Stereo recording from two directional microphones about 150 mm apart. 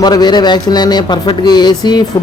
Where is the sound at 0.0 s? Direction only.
25° left (ahead or behind).